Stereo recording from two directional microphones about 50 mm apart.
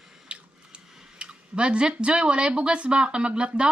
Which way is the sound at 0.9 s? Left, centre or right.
Centre.